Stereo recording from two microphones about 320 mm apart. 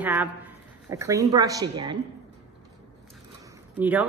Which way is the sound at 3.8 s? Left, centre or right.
Centre.